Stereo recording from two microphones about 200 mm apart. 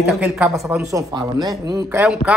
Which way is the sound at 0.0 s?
5° right (ahead or behind).